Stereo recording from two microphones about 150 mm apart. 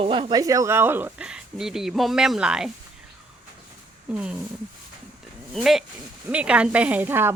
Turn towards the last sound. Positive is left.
turn(degrees=-15)  # may be behind; listen again after turning